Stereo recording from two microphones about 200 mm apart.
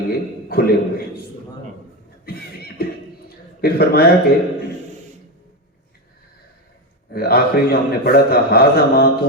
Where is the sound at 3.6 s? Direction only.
50° left (ahead or behind).